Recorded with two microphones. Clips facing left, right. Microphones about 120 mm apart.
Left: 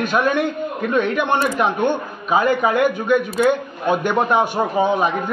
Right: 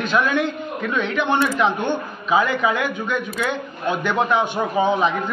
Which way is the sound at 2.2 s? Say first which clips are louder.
Left 2 dB; 45° left (ahead or behind).